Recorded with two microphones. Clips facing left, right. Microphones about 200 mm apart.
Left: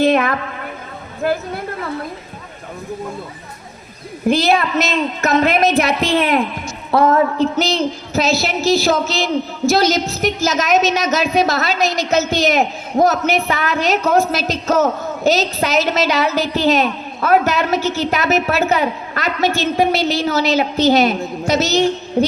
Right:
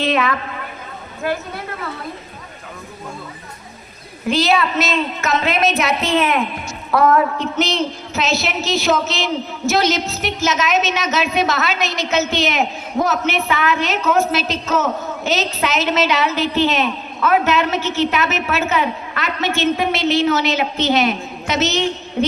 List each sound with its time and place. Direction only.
0.0 s a woman's voice: 50° left (ahead or behind)
4.3 s a woman's voice: 55° left (ahead or behind)
5.7 s a woman's voice: 35° left (ahead or behind)